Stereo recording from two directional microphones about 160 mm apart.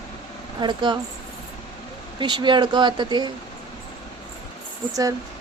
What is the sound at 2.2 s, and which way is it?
Speech, 30° right (ahead or behind).